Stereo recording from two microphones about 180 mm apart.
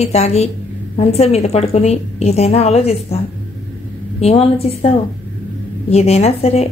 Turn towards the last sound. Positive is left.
turn(degrees=35)  # may be behind; listen again after turning